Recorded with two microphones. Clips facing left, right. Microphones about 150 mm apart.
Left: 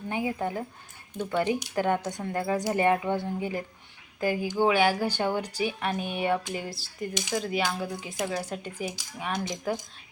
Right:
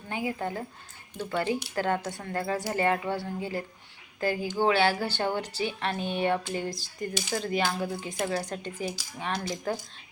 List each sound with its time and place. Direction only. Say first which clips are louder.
0.1 s speech: left 2 dB; 20° left (ahead or behind)
7.1 s speech: right 1 dB; 15° left (ahead or behind)
7.3 s speech: even; centre (ahead or behind); by 9.6 s 20° left (ahead or behind)